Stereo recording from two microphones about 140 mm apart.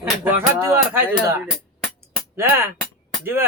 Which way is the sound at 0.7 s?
15° right (ahead or behind).